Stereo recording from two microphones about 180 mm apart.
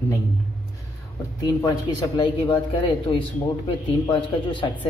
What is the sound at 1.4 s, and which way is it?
Speech, 20° left (ahead or behind).